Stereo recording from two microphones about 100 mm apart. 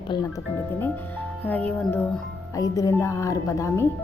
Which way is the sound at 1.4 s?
15° left (ahead or behind).